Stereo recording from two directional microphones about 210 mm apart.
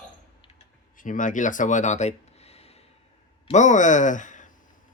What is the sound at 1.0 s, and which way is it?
Speech, 40° left (ahead or behind).